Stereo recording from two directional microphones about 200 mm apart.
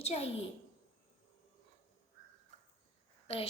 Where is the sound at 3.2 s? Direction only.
30° left (ahead or behind).